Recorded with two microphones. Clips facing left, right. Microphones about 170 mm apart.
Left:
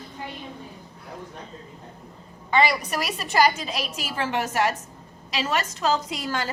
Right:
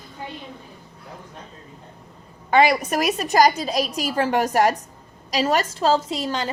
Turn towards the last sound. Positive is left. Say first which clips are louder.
# right 4 dB
turn(degrees=-25)  # may be behind; listen again after turning